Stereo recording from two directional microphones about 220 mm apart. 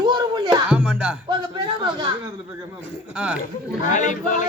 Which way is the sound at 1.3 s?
20° right (ahead or behind).